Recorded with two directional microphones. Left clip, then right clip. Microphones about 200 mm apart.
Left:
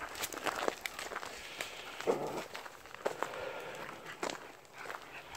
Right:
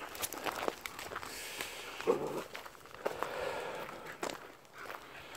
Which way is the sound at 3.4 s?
50° right (ahead or behind).